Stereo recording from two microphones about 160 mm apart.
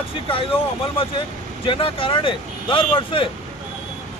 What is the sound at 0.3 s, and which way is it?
Speech, 35° left (ahead or behind).